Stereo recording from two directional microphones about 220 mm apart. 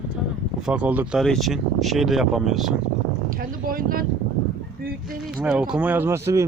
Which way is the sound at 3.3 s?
40° right (ahead or behind).